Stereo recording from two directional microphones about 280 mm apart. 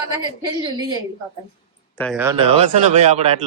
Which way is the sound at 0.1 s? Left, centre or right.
Centre.